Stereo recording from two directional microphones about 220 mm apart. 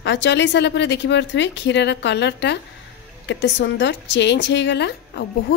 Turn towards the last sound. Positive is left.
turn(degrees=50)  # may be behind; listen again after turning